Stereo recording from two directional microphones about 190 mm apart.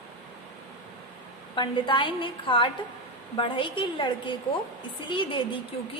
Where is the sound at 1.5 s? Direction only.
25° left (ahead or behind).